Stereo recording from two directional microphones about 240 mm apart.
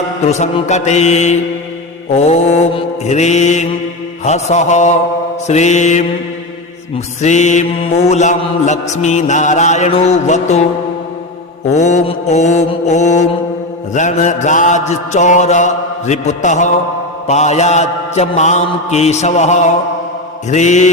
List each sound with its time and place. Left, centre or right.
0.3 s mantra: left
7.2 s mantra: left
11.7 s mantra: left